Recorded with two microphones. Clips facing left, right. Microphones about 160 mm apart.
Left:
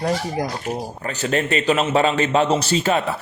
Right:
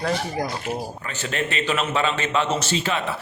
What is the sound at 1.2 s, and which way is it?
A man's voice, 40° left (ahead or behind).